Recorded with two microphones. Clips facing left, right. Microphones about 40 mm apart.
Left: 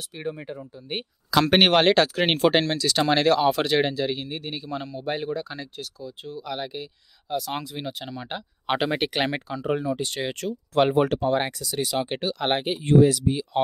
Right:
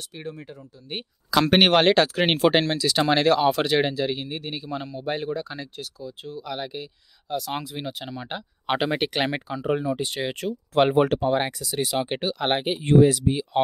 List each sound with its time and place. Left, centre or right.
0.2 s speech: centre
0.9 s speech: centre
12.8 s speech: right